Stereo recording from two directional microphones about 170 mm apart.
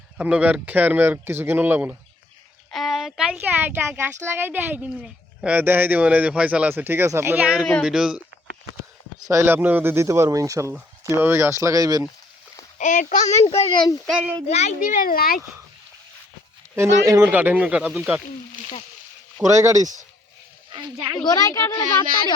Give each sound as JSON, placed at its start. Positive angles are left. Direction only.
{"t": 0.2, "sound": "speech", "side_deg": -5}
{"t": 2.7, "sound": "speech", "side_deg": 0}
{"t": 9.3, "sound": "speech", "side_deg": -15}
{"t": 12.8, "sound": "speech", "side_deg": 50}
{"t": 13.6, "sound": "speech", "side_deg": 30}
{"t": 14.1, "sound": "speech", "side_deg": -5}
{"t": 14.4, "sound": "speech", "side_deg": 40}
{"t": 16.7, "sound": "speech", "side_deg": -15}
{"t": 19.4, "sound": "speech", "side_deg": -15}
{"t": 20.7, "sound": "a sound", "side_deg": -30}
{"t": 21.2, "sound": "speech", "side_deg": 20}